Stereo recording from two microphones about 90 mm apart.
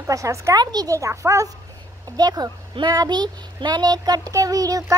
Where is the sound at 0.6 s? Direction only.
45° right (ahead or behind).